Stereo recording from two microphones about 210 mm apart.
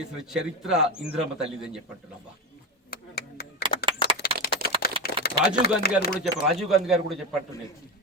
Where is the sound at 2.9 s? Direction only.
50° left (ahead or behind).